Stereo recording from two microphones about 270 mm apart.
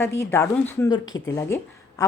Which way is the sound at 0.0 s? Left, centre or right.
Centre.